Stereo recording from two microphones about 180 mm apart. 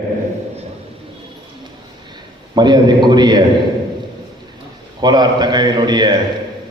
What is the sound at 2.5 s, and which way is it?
Speech, 25° right (ahead or behind).